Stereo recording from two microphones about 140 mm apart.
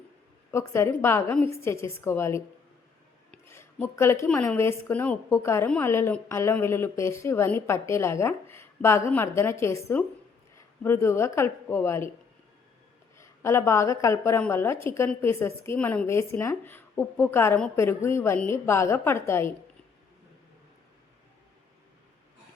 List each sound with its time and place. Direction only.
0.5 s a woman's voice: 20° left (ahead or behind)
3.3 s a sound: 15° left (ahead or behind)
4.3 s a woman's voice: 15° left (ahead or behind)
5.6 s a woman's voice: 10° left (ahead or behind)
13.1 s a woman's voice: 20° left (ahead or behind)